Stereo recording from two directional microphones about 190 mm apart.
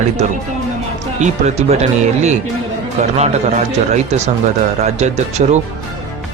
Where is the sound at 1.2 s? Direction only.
40° right (ahead or behind).